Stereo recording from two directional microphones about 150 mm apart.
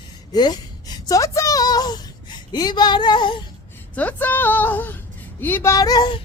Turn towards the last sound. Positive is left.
turn(degrees=25)  # may be behind; listen again after turning